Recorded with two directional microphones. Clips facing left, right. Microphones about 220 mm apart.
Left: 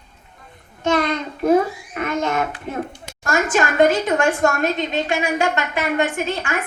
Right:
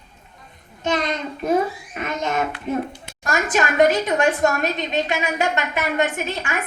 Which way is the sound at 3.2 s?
20° right (ahead or behind).